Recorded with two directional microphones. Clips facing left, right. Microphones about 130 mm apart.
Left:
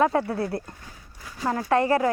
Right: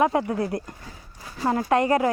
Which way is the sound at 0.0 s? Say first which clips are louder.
Right 1 dB; 20° right (ahead or behind).